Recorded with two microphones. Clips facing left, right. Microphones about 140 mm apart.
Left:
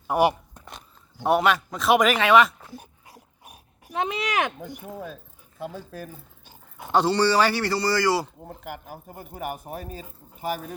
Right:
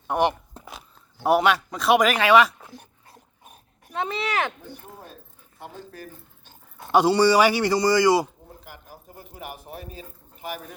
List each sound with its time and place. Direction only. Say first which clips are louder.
0.1 s speech: left 1 dB; 10° left (ahead or behind)
0.6 s speech: right 2 dB; 5° right (ahead or behind)
2.7 s dog: left 3 dB; 10° left (ahead or behind)
6.4 s dog: left 1 dB; 15° left (ahead or behind)
6.9 s speech: right 3 dB; 10° right (ahead or behind)
8.4 s speech: left 7 dB; 60° left (ahead or behind); by 10.8 s 35° left (ahead or behind)